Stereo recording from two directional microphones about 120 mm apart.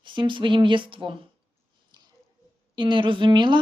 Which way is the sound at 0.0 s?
45° right (ahead or behind).